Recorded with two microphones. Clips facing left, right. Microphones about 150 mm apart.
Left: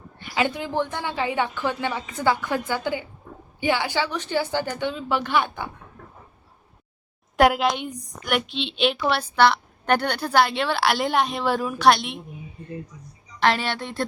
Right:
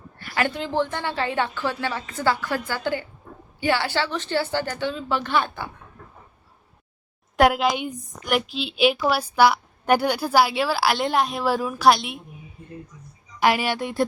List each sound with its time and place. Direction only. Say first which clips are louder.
0.2 s a woman's voice: even; 15° left (ahead or behind)
7.3 s a woman's voice: even; centre (ahead or behind)
13.4 s a woman's voice: right 2 dB; 10° right (ahead or behind)